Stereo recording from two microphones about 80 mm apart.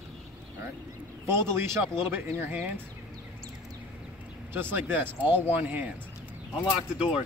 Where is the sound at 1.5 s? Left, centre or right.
Right.